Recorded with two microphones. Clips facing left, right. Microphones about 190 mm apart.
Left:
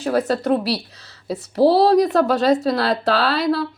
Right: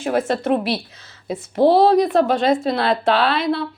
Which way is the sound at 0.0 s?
35° left (ahead or behind).